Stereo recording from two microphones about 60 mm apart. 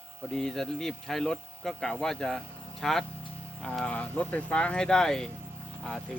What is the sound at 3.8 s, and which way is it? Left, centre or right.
Speech, left.